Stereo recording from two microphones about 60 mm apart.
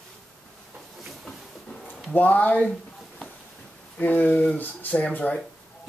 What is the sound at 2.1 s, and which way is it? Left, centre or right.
Speech, left.